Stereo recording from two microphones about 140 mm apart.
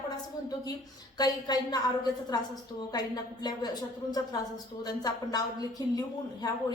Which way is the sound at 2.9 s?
30° left (ahead or behind).